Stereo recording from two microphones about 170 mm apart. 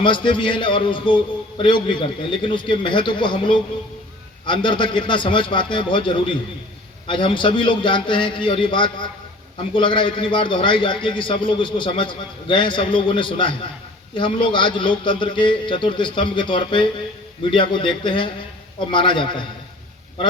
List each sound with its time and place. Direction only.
0.0 s a man's voice: 30° left (ahead or behind)